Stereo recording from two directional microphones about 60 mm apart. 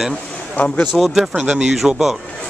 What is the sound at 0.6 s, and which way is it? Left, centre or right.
Speech, left.